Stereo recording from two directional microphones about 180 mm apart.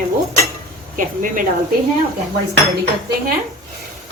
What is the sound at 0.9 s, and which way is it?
Speech, 50° right (ahead or behind).